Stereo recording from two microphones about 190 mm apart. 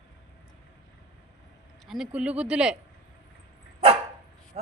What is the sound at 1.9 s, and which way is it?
Speech, 5° right (ahead or behind).